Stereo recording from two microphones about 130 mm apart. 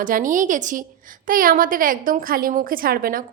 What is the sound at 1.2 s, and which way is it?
A woman's voice, 90° right.